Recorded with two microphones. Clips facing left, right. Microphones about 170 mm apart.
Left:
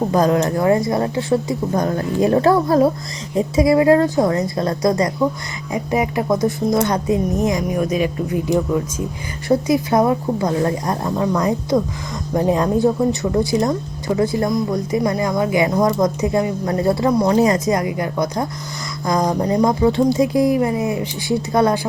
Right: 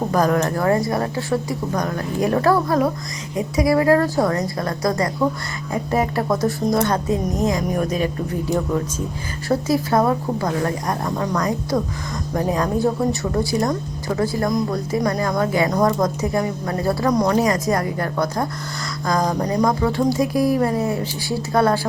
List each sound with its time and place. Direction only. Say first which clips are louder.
0.1 s a woman's voice: left 1 dB; 20° left (ahead or behind)
8.5 s speech: left 2 dB; centre (ahead or behind)
9.5 s a woman's voice: left 3 dB; 20° left (ahead or behind)